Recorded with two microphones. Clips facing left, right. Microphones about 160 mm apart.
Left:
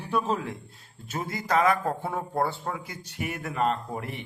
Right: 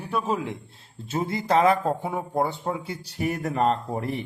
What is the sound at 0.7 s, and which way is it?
Speech, 25° right (ahead or behind).